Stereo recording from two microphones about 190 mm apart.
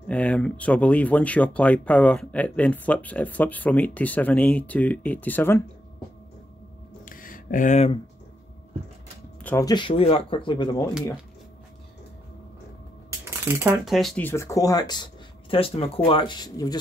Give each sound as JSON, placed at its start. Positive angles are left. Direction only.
{"t": 0.1, "sound": "speech", "side_deg": 5}
{"t": 7.1, "sound": "a sound", "side_deg": 45}
{"t": 9.4, "sound": "speech", "side_deg": 15}
{"t": 13.5, "sound": "speech", "side_deg": -10}